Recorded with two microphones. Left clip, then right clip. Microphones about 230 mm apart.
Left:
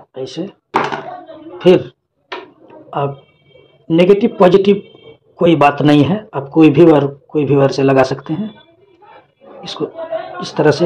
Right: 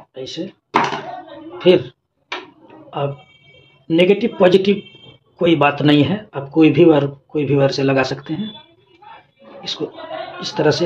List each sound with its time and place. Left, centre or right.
0.1 s speech: centre
1.6 s a woman's voice: centre
9.6 s speech: centre